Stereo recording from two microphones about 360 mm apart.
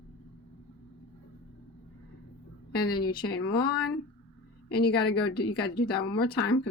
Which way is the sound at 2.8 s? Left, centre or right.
Left.